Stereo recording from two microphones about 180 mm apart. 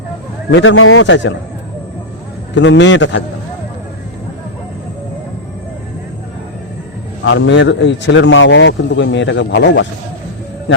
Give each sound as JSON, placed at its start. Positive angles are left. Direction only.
{"t": 0.5, "sound": "a man's voice", "side_deg": 90}
{"t": 2.6, "sound": "a man's voice", "side_deg": 90}
{"t": 7.3, "sound": "a man's voice", "side_deg": 90}